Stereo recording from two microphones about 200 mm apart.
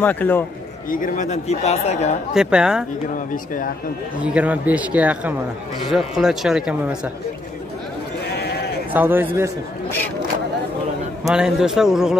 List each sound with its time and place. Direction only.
0.0 s a man's voice: 10° left (ahead or behind)
0.8 s speech: 40° left (ahead or behind)
2.3 s speech: 5° right (ahead or behind)
4.2 s speech: 5° right (ahead or behind)
8.9 s speech: 10° right (ahead or behind)
11.2 s speech: 5° right (ahead or behind)